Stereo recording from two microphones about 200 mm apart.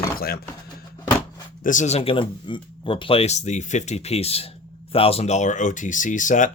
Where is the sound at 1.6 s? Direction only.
40° left (ahead or behind).